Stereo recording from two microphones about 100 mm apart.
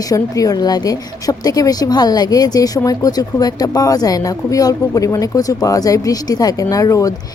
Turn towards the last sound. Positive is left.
turn(degrees=35)  # may be behind; listen again after turning